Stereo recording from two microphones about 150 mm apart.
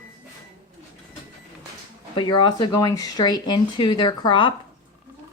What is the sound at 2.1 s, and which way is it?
Speech, 30° left (ahead or behind).